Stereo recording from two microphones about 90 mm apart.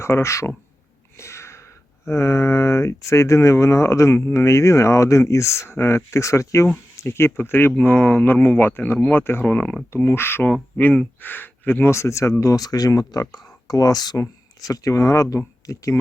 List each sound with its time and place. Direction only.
0.0 s speech: 30° left (ahead or behind)
1.2 s a sound: 30° left (ahead or behind)
2.0 s speech: 30° left (ahead or behind)